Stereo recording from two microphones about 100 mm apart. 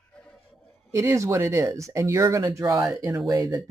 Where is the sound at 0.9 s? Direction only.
30° right (ahead or behind).